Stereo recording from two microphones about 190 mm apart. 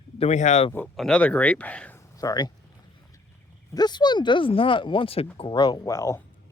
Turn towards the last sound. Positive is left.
turn(degrees=15)  # may be behind; listen again after turning